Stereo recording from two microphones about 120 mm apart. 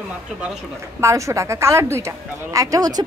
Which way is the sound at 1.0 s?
25° right (ahead or behind).